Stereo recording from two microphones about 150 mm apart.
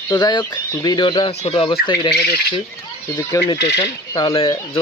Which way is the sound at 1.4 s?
40° left (ahead or behind).